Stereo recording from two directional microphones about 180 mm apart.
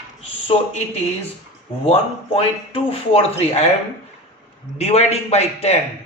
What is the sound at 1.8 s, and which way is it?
A man's voice, 35° left (ahead or behind).